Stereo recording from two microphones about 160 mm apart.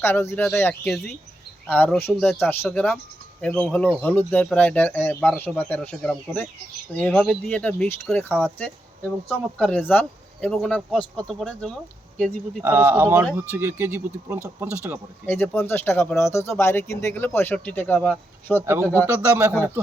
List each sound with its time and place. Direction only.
0.0 s speech: 15° left (ahead or behind)
0.9 s speech: centre (ahead or behind)
12.6 s speech: 15° right (ahead or behind)
15.3 s speech: 15° left (ahead or behind)
18.6 s speech: 15° right (ahead or behind)